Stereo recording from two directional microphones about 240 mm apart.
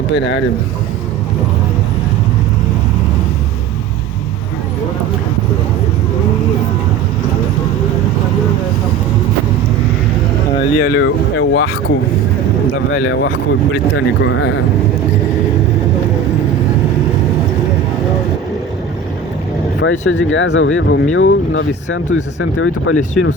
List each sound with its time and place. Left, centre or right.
0.1 s speech: left
10.8 s speech: left
12.9 s speech: left
19.8 s speech: left